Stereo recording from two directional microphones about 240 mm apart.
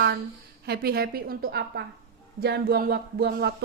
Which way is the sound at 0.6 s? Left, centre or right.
Right.